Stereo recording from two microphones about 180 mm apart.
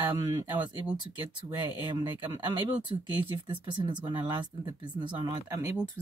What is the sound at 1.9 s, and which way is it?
Speech, 25° right (ahead or behind).